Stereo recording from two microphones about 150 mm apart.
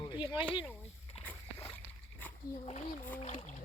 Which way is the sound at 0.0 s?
30° left (ahead or behind).